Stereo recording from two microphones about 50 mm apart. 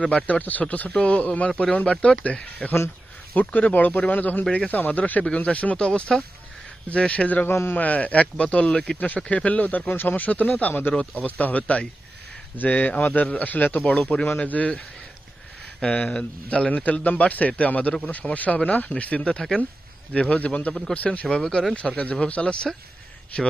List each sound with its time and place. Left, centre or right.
0.4 s speech: left
7.4 s speech: left
7.7 s speech: left
10.7 s speech: left
11.2 s speech: left
13.8 s speech: left
15.8 s speech: left
21.4 s speech: centre
21.7 s speech: left